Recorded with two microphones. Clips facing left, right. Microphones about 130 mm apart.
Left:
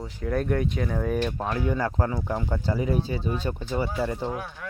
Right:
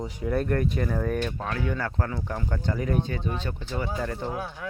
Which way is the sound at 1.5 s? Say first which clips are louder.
Left 3 dB; 15° left (ahead or behind).